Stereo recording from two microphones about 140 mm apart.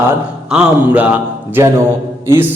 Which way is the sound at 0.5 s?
10° right (ahead or behind).